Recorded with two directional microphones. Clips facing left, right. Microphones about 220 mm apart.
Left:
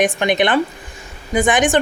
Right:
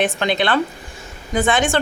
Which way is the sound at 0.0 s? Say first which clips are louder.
Left 3 dB; 15° left (ahead or behind).